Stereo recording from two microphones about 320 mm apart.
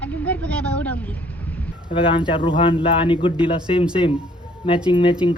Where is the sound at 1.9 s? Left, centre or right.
Centre.